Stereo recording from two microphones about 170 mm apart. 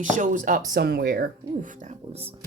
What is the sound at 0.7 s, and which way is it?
Speech, 70° right (ahead or behind).